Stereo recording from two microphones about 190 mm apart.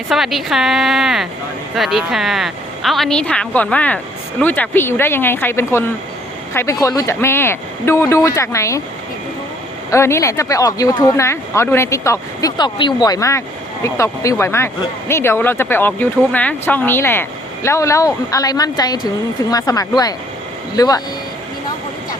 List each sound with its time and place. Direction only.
0.1 s a woman's voice: centre (ahead or behind); by 8.8 s 15° left (ahead or behind)
9.9 s speech: 15° left (ahead or behind)